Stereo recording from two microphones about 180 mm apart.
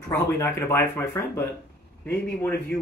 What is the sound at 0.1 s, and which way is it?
Speech, 15° left (ahead or behind).